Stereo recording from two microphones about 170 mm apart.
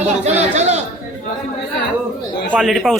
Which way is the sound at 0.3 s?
40° right (ahead or behind).